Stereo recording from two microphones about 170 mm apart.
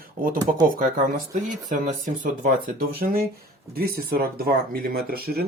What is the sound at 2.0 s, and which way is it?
Speech, 50° right (ahead or behind).